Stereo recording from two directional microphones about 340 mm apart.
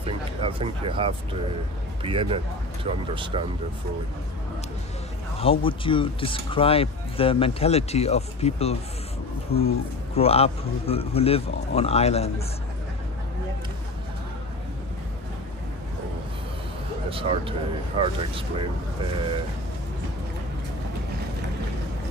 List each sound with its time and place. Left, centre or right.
0.0 s speech: centre
5.4 s speech: centre
17.1 s speech: centre